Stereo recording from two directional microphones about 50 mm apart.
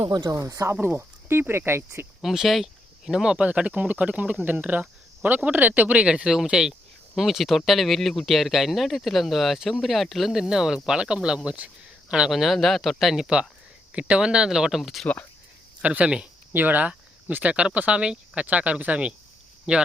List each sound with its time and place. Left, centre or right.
0.3 s speech: right
0.7 s speech: right
2.2 s speech: centre
3.4 s speech: right
11.5 s a sound: right
12.3 s speech: centre
13.1 s speech: centre
15.0 s speech: left
15.8 s speech: right
16.5 s speech: right